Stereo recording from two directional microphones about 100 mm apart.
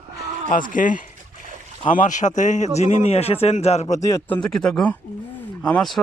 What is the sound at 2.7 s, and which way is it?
A man's voice, 90° left.